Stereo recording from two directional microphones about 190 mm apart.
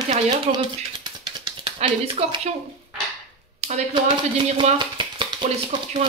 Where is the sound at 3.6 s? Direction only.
35° right (ahead or behind).